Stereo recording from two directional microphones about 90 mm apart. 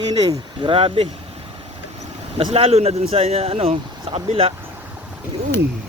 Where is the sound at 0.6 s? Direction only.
90° right.